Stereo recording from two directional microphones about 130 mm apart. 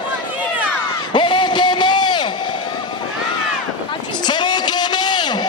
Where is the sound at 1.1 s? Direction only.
40° left (ahead or behind).